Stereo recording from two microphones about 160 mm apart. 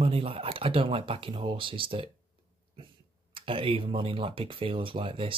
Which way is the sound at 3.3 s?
35° right (ahead or behind).